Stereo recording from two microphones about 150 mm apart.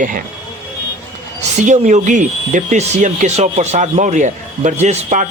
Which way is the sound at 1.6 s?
55° right (ahead or behind).